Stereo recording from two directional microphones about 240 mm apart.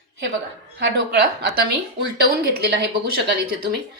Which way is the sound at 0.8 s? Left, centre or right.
Right.